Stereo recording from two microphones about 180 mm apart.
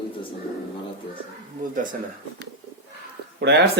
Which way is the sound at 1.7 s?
45° right (ahead or behind).